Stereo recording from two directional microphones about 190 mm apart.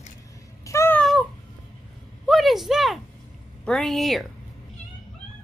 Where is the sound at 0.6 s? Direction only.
15° left (ahead or behind).